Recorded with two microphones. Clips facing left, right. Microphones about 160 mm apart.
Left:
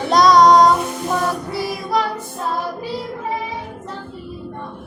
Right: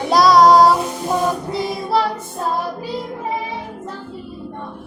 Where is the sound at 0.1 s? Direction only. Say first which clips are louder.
Even; 5° right (ahead or behind); by 2.0 s 30° right (ahead or behind).